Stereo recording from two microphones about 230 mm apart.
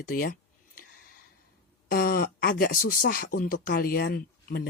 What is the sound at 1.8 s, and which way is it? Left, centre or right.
Speech, left.